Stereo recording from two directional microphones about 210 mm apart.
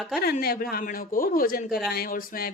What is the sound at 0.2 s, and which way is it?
A woman's voice, 45° left (ahead or behind).